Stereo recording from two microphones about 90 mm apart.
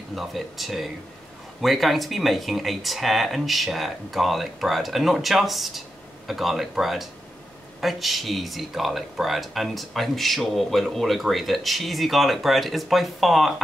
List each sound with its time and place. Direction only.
0.1 s speech: centre (ahead or behind)